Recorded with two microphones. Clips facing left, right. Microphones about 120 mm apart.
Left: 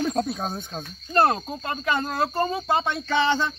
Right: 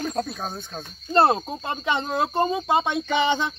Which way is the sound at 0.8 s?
25° right (ahead or behind).